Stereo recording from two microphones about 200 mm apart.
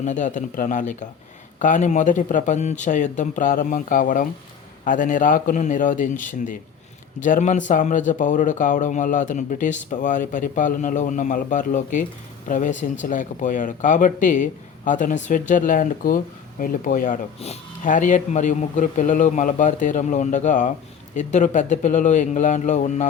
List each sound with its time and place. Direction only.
0.0 s speech: 40° left (ahead or behind)